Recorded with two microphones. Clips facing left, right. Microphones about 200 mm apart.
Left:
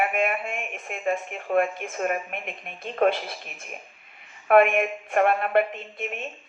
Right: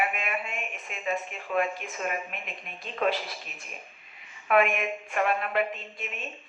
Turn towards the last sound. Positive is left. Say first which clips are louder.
# left 3 dB
turn(degrees=50)  # may be behind; listen again after turning